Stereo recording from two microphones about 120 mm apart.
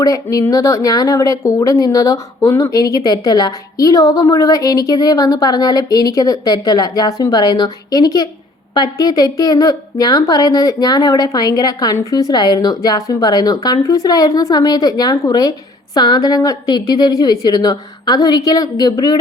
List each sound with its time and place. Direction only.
0.0 s a woman's voice: 30° left (ahead or behind)